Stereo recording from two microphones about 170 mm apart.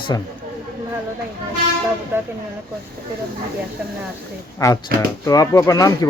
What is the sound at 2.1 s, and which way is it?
Speech, 15° right (ahead or behind).